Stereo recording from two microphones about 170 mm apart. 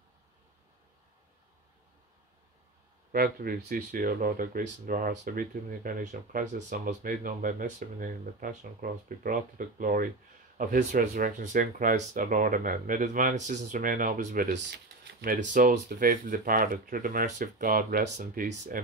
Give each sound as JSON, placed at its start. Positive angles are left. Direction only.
{"t": 3.1, "sound": "speech", "side_deg": -60}